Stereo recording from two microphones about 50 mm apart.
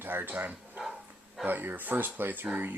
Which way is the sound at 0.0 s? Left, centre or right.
Right.